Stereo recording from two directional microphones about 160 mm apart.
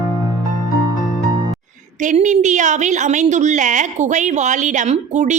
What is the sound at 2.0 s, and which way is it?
A woman's voice, 50° right (ahead or behind).